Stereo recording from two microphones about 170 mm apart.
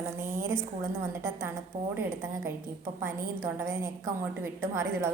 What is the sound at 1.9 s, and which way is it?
A woman's voice, 15° right (ahead or behind).